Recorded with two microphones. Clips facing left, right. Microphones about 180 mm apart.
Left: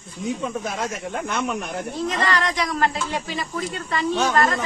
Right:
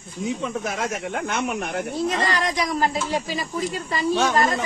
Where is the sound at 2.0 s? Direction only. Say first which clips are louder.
Right 1 dB; 35° right (ahead or behind).